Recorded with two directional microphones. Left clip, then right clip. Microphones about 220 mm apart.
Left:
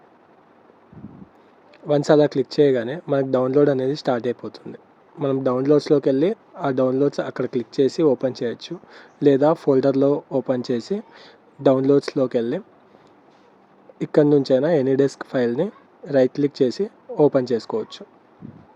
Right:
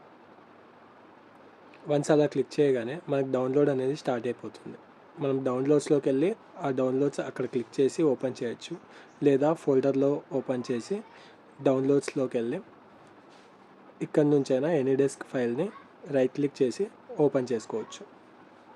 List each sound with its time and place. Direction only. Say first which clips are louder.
1.9 s speech: left 8 dB; 20° left (ahead or behind)
14.0 s speech: left 8 dB; 20° left (ahead or behind)